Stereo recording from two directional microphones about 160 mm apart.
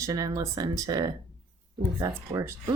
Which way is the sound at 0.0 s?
20° right (ahead or behind).